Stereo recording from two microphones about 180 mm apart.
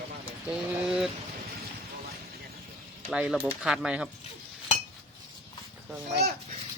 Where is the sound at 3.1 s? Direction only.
5° right (ahead or behind).